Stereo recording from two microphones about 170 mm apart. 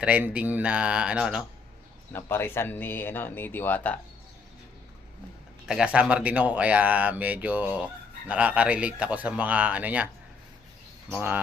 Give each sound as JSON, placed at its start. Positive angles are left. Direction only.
{"t": 0.0, "sound": "speech", "side_deg": -10}
{"t": 2.1, "sound": "speech", "side_deg": 15}
{"t": 5.6, "sound": "speech", "side_deg": -5}